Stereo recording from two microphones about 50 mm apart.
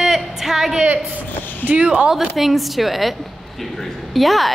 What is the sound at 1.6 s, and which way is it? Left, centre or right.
Speech, left.